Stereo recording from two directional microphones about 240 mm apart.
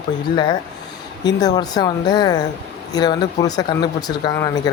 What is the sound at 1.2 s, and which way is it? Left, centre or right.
Speech, centre.